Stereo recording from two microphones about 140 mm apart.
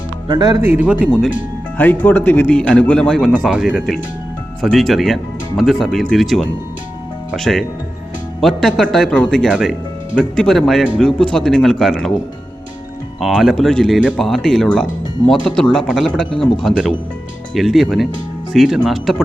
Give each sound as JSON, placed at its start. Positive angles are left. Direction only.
{"t": 0.3, "sound": "speech", "side_deg": -30}
{"t": 0.6, "sound": "speech", "side_deg": -15}
{"t": 1.8, "sound": "a man's voice", "side_deg": 10}
{"t": 13.1, "sound": "speech", "side_deg": 0}